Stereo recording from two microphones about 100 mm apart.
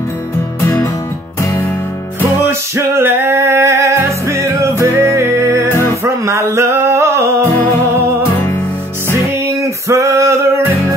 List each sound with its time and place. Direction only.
2.4 s music: 25° right (ahead or behind)
5.7 s music: 30° left (ahead or behind)
6.0 s a sound: 30° right (ahead or behind)
9.6 s male singing: 30° right (ahead or behind)